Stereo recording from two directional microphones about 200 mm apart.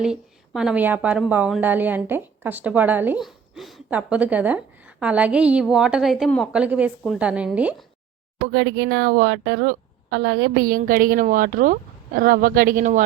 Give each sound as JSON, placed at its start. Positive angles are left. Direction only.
{"t": 0.0, "sound": "a woman's voice", "side_deg": -5}
{"t": 8.5, "sound": "a woman's voice", "side_deg": -65}